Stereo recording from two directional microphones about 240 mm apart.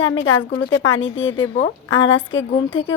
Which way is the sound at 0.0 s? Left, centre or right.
Left.